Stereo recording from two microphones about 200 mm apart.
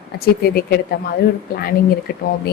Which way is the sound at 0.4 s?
50° left (ahead or behind).